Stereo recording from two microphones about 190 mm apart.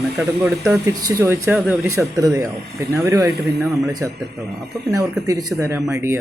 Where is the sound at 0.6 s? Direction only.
15° right (ahead or behind).